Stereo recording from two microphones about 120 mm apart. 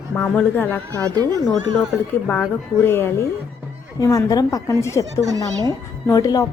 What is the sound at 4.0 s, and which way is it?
A woman's voice, 30° left (ahead or behind).